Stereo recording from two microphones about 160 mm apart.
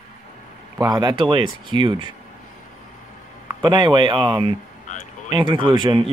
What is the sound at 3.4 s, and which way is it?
Speech, 25° right (ahead or behind).